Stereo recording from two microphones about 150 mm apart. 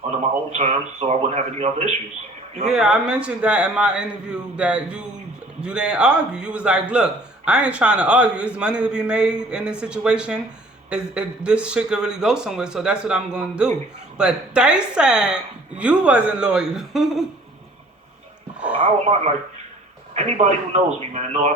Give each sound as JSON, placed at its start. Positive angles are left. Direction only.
{"t": 0.2, "sound": "speech", "side_deg": -45}
{"t": 2.6, "sound": "a man's voice", "side_deg": -5}
{"t": 18.8, "sound": "speech", "side_deg": -45}